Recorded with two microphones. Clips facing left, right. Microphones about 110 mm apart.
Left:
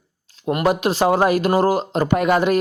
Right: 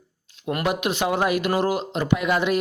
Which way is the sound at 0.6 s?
35° left (ahead or behind).